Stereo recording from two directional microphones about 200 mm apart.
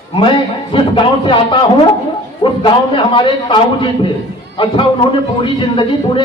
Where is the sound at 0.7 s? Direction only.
25° left (ahead or behind).